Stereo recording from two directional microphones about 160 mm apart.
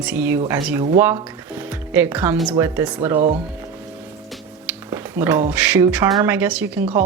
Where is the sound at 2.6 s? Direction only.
10° right (ahead or behind).